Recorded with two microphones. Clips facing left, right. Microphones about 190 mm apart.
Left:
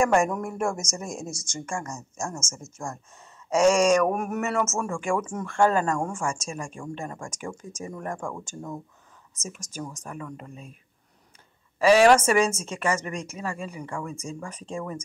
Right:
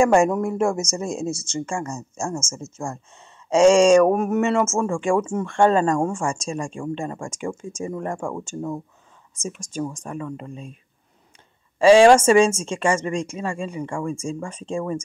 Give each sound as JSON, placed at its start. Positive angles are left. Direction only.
{"t": 0.0, "sound": "a woman's voice", "side_deg": -25}
{"t": 11.8, "sound": "a woman's voice", "side_deg": -25}